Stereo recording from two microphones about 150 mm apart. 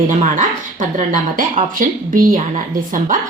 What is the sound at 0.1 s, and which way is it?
Speech, 55° right (ahead or behind).